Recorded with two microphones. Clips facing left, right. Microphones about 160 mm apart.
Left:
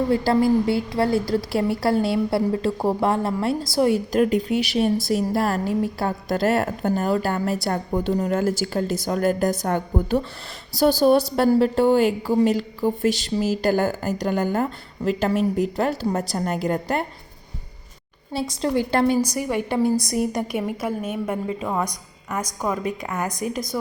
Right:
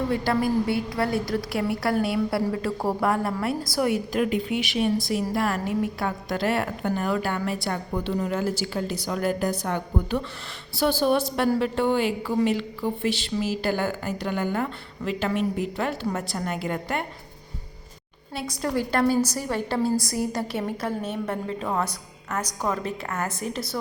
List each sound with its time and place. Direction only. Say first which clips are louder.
0.1 s a woman's voice: left 7 dB; 30° left (ahead or behind)
18.3 s a woman's voice: left 4 dB; 25° left (ahead or behind)
19.3 s a woman's voice: left 3 dB; 15° left (ahead or behind)